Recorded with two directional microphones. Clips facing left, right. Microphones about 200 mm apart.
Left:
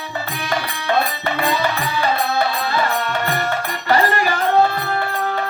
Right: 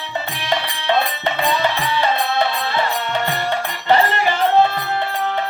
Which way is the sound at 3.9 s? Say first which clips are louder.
Right 1 dB; 25° right (ahead or behind).